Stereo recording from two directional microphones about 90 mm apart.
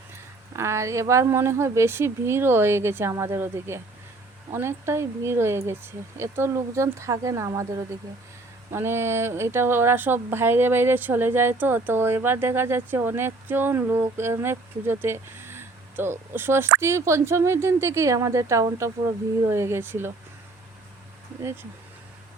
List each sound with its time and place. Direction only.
0.1 s a woman's voice: 30° right (ahead or behind)
8.7 s a woman's voice: 25° right (ahead or behind)